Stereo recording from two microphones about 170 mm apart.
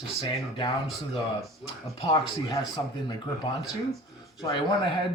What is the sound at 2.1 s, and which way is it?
Speech, 25° left (ahead or behind).